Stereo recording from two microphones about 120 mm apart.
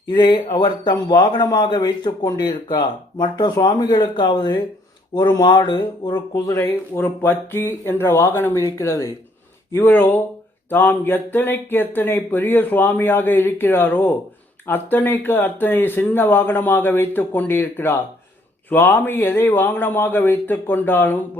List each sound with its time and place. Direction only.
0.2 s a man's voice: 40° left (ahead or behind); by 21.2 s 15° left (ahead or behind)